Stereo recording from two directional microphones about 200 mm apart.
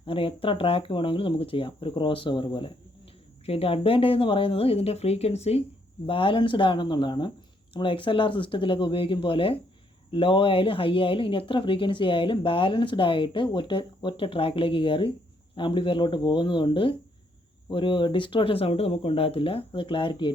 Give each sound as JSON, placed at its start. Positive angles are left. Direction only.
{"t": 0.0, "sound": "speech", "side_deg": 25}